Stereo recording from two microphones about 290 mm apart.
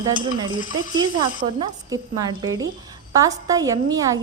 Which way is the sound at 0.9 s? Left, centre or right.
Centre.